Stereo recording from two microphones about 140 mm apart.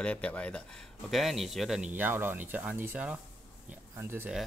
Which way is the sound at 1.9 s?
15° right (ahead or behind).